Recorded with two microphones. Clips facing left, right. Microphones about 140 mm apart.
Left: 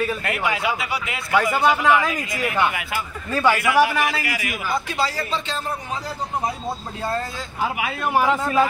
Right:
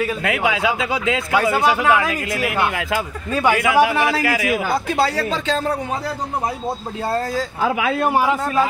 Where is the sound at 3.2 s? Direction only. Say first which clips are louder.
Right 1 dB; 15° right (ahead or behind).